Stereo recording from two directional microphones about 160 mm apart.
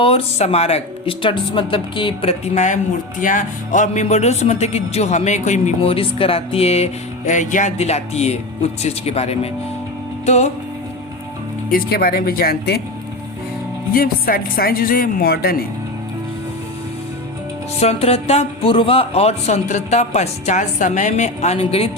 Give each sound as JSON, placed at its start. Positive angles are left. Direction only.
{"t": 0.0, "sound": "speech", "side_deg": 40}
{"t": 11.7, "sound": "speech", "side_deg": 70}
{"t": 13.9, "sound": "speech", "side_deg": 65}
{"t": 17.7, "sound": "speech", "side_deg": 40}